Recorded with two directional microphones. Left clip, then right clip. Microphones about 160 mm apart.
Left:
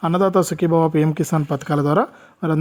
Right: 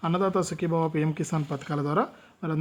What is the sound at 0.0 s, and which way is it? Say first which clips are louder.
Speech: left 9 dB; 50° left (ahead or behind).